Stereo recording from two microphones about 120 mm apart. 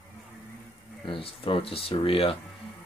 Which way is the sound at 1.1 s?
50° left (ahead or behind).